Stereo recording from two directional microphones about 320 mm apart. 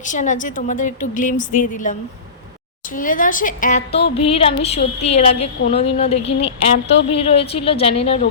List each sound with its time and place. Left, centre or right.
0.0 s a woman's voice: left